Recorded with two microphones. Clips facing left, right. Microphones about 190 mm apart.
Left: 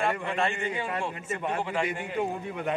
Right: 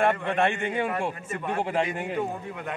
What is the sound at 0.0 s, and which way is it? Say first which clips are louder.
Speech: right 4 dB; 60° right (ahead or behind).